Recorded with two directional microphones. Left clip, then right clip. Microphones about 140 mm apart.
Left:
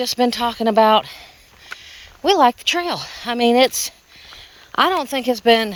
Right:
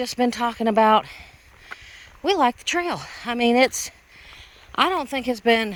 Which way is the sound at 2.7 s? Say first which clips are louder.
Left 4 dB; 25° right (ahead or behind).